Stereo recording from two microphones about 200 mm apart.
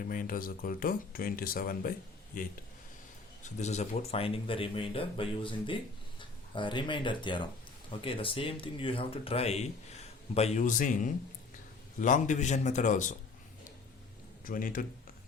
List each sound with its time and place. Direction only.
0.0 s a man's voice: 45° left (ahead or behind)
14.4 s speech: 45° left (ahead or behind)